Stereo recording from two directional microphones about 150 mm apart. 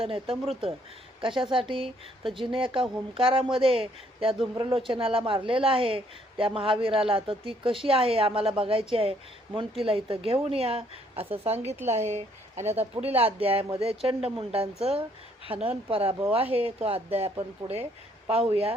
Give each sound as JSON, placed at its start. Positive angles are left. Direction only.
{"t": 0.0, "sound": "speech", "side_deg": -40}